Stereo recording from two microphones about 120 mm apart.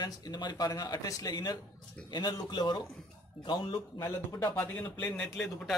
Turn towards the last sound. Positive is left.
turn(degrees=10)  # may be behind; listen again after turning